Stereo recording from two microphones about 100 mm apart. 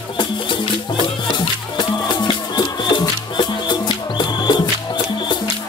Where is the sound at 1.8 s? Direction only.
50° left (ahead or behind).